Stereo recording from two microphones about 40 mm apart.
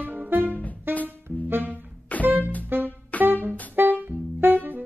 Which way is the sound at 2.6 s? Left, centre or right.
Right.